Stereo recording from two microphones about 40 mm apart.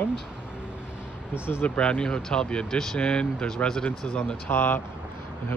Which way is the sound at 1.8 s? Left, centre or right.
Left.